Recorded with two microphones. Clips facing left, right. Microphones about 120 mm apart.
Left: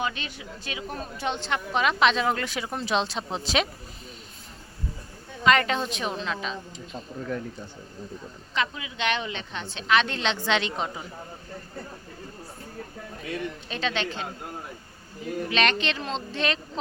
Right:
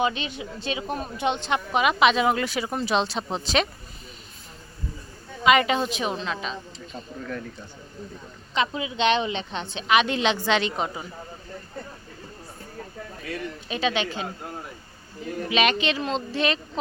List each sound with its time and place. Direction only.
0.0 s a woman's voice: 20° right (ahead or behind); by 3.7 s centre (ahead or behind)
5.4 s a woman's voice: 10° right (ahead or behind)
7.2 s speech: 20° left (ahead or behind)
8.5 s a woman's voice: 20° right (ahead or behind); by 11.0 s 5° right (ahead or behind)
13.2 s speech: 20° left (ahead or behind)
13.7 s a woman's voice: 10° right (ahead or behind)
15.4 s a woman's voice: 5° right (ahead or behind)